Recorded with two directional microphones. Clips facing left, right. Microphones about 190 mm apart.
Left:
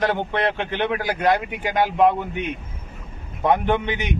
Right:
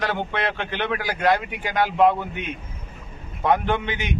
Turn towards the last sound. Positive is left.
turn(degrees=15)  # may be behind; listen again after turning